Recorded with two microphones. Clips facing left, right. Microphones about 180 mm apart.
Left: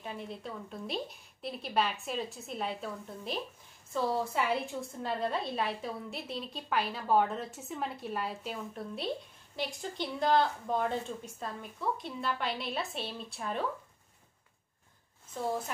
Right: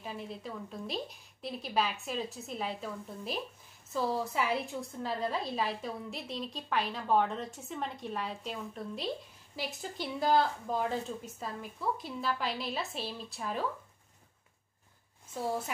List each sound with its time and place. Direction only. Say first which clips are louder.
0.0 s a woman's voice: even; centre (ahead or behind)